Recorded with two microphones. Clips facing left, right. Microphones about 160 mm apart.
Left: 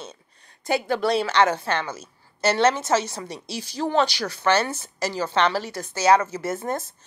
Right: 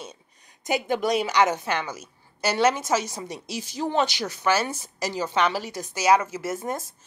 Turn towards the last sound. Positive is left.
turn(degrees=-10)  # may be behind; listen again after turning